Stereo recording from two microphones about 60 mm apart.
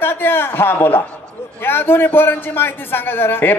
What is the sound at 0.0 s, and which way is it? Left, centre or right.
A man's voice, left.